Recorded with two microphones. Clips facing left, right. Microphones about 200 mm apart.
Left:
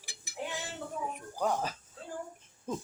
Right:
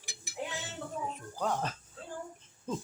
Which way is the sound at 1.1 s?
10° left (ahead or behind).